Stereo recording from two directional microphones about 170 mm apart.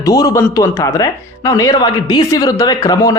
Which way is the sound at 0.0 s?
20° left (ahead or behind).